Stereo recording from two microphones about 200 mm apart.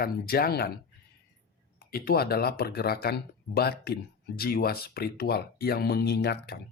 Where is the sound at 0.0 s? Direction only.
50° left (ahead or behind).